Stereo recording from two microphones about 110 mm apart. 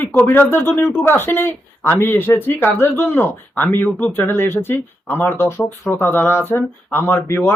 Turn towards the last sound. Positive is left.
turn(degrees=20)  # may be behind; listen again after turning